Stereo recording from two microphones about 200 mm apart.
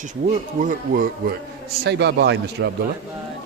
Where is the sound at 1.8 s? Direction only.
60° right (ahead or behind).